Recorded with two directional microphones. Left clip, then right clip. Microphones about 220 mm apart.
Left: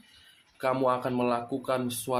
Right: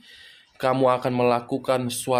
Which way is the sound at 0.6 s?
45° right (ahead or behind).